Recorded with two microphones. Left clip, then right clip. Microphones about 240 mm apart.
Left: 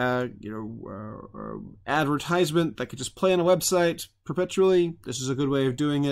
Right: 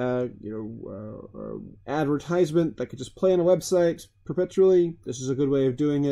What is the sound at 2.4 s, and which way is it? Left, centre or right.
Speech, left.